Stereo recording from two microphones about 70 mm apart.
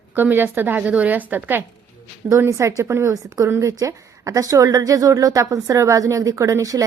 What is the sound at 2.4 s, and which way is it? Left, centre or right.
A woman's voice, right.